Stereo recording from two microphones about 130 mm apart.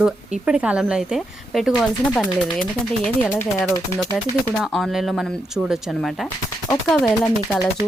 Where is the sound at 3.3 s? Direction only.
20° left (ahead or behind).